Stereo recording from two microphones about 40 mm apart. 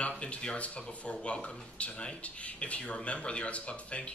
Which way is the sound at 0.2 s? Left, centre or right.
Left.